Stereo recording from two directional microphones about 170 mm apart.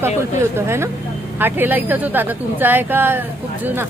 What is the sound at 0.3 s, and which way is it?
Speech, 15° right (ahead or behind).